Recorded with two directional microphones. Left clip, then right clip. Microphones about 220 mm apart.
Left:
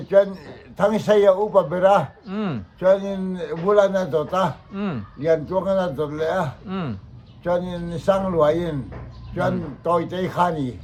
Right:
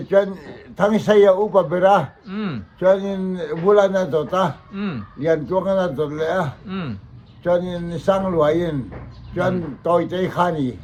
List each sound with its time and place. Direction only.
0.3 s a man's voice: centre (ahead or behind)
2.2 s speech: 15° left (ahead or behind)
2.8 s a man's voice: centre (ahead or behind)